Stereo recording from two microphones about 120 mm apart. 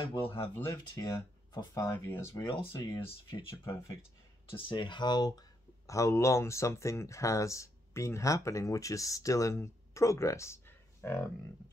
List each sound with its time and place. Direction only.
0.0 s speech: 45° left (ahead or behind)
2.0 s speech: 20° left (ahead or behind)
2.8 s speech: 40° left (ahead or behind)
3.6 s speech: 25° left (ahead or behind)
4.5 s speech: 45° left (ahead or behind)
5.9 s speech: 25° left (ahead or behind)